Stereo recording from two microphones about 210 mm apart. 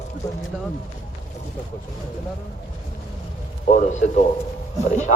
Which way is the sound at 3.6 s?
35° left (ahead or behind).